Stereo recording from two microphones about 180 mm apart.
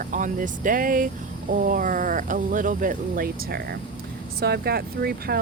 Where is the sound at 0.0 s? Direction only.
45° right (ahead or behind).